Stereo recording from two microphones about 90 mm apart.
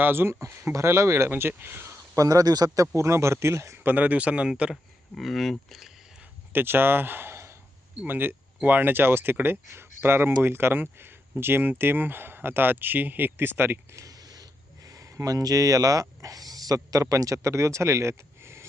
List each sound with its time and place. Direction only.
0.0 s speech: 25° right (ahead or behind)
2.1 s speech: 40° right (ahead or behind)
3.9 s speech: 15° right (ahead or behind)
5.1 s speech: centre (ahead or behind)
6.5 s speech: 25° right (ahead or behind)